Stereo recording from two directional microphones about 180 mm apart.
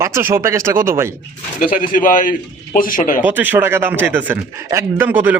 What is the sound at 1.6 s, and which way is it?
Speech, 50° left (ahead or behind).